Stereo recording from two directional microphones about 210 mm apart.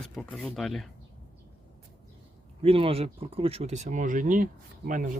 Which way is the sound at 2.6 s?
25° right (ahead or behind).